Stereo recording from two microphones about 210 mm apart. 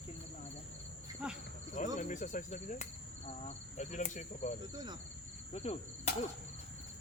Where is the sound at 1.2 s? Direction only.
5° right (ahead or behind).